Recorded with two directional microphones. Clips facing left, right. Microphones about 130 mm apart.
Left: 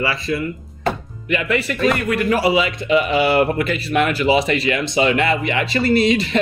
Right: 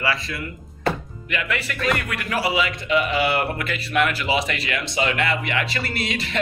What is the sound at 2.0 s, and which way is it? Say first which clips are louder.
A man's voice: left 8 dB; 25° left (ahead or behind).